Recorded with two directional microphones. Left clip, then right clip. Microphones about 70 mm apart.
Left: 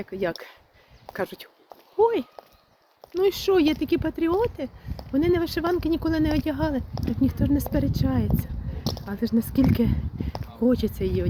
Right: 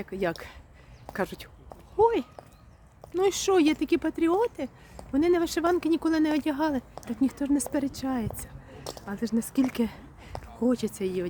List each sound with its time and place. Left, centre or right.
0.0 s speech: right
3.2 s speech: right
7.2 s speech: right; by 9.8 s centre
9.8 s speech: right